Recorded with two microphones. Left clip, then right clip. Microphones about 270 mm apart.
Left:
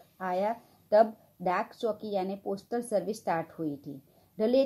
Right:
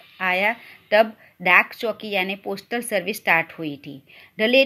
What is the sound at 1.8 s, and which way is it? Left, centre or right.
Speech, right.